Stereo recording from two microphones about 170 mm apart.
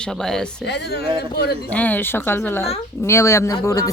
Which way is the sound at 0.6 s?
80° left.